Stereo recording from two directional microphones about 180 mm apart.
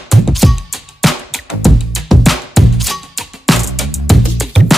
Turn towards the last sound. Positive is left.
turn(degrees=0)  # may be behind; listen again after turning